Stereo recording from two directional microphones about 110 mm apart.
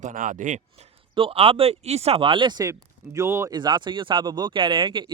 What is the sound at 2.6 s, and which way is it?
Speech, 30° right (ahead or behind).